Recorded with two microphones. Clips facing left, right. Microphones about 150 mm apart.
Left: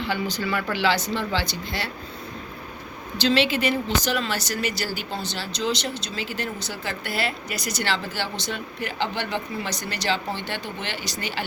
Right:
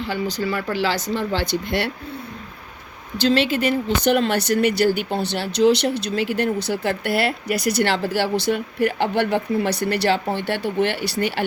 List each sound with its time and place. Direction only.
0.0 s speech: 40° right (ahead or behind); by 1.9 s 55° right (ahead or behind)
3.2 s speech: 45° right (ahead or behind)